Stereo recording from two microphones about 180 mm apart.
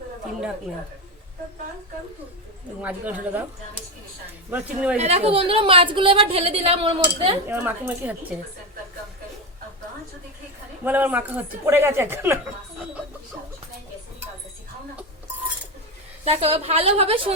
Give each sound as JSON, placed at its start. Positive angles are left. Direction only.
{"t": 2.8, "sound": "speech", "side_deg": -10}
{"t": 4.5, "sound": "speech", "side_deg": -5}
{"t": 4.9, "sound": "a woman's voice", "side_deg": -35}
{"t": 7.4, "sound": "speech", "side_deg": -10}
{"t": 10.8, "sound": "speech", "side_deg": -10}
{"t": 16.2, "sound": "a woman's voice", "side_deg": -35}